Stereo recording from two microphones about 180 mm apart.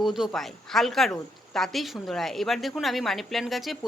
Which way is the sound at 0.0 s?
Centre (ahead or behind).